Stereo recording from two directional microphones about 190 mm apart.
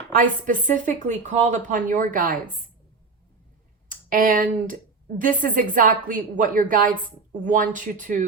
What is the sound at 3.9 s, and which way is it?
A woman's voice, 45° right (ahead or behind).